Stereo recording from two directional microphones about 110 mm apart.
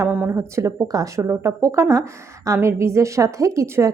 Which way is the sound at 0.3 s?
25° right (ahead or behind).